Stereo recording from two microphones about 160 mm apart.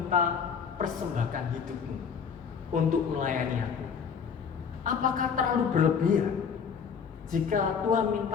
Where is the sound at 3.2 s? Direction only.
55° right (ahead or behind).